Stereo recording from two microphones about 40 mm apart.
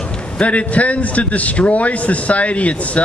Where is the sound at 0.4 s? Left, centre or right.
Left.